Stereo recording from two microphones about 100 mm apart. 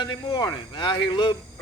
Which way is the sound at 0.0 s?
45° left (ahead or behind).